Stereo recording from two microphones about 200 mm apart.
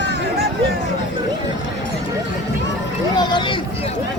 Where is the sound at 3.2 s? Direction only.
25° left (ahead or behind).